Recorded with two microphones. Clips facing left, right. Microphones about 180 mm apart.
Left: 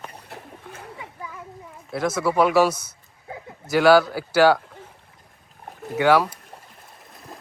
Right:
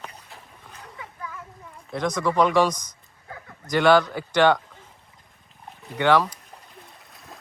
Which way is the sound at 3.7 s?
5° left (ahead or behind).